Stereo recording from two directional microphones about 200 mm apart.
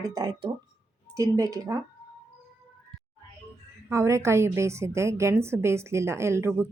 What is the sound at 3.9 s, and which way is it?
A woman's voice, 15° right (ahead or behind).